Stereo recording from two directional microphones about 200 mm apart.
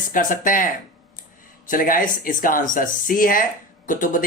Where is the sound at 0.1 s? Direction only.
40° left (ahead or behind).